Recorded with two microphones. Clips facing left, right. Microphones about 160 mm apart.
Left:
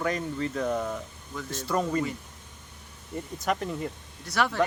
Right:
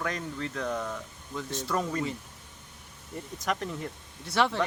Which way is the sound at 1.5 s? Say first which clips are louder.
Left 3 dB; centre (ahead or behind).